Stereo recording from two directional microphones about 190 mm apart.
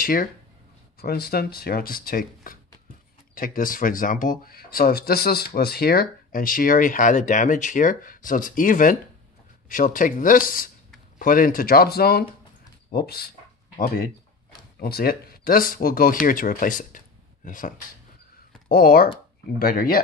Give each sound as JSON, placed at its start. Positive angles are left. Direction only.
{"t": 0.0, "sound": "speech", "side_deg": 50}